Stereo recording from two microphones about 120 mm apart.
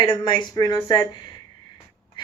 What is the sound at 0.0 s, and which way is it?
Speech, 40° left (ahead or behind).